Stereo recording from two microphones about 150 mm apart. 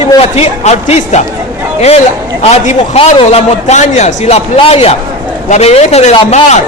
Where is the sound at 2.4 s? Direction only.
45° left (ahead or behind).